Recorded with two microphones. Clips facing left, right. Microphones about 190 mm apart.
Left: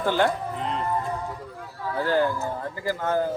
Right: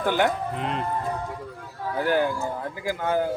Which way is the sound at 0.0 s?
15° right (ahead or behind).